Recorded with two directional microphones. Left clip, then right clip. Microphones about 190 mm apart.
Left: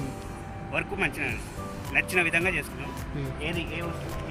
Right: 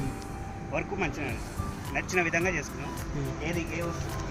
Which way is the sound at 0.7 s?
10° right (ahead or behind).